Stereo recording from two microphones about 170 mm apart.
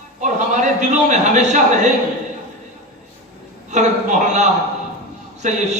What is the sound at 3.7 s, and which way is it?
A man's voice, 45° right (ahead or behind).